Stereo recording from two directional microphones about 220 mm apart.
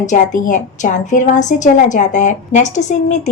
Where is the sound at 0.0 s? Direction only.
35° left (ahead or behind).